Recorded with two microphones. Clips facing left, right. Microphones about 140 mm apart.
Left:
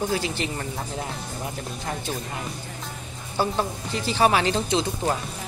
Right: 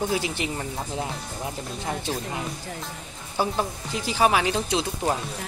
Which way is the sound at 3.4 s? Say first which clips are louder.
Left 1 dB; 10° right (ahead or behind).